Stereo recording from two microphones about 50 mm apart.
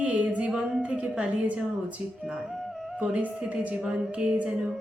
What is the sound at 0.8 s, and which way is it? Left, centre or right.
Speech, right.